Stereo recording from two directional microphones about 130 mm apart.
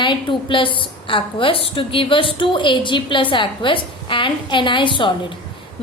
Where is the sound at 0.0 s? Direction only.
40° left (ahead or behind).